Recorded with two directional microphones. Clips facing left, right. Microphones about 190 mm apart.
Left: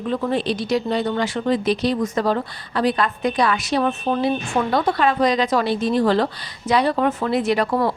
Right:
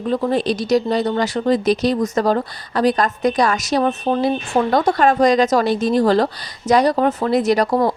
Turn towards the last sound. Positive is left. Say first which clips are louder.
# right 3 dB
turn(degrees=-40)  # may be behind; listen again after turning